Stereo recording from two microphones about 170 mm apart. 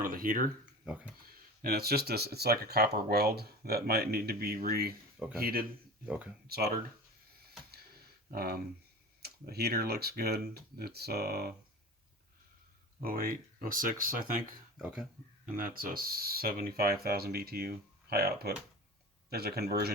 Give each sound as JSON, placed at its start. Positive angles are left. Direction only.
{"t": 0.0, "sound": "speech", "side_deg": -55}
{"t": 0.6, "sound": "a sound", "side_deg": -5}
{"t": 1.6, "sound": "speech", "side_deg": -65}
{"t": 6.1, "sound": "speech", "side_deg": -10}
{"t": 6.5, "sound": "speech", "side_deg": -65}
{"t": 8.3, "sound": "speech", "side_deg": -65}
{"t": 13.0, "sound": "speech", "side_deg": -55}
{"t": 14.8, "sound": "speech", "side_deg": -5}
{"t": 15.5, "sound": "speech", "side_deg": -55}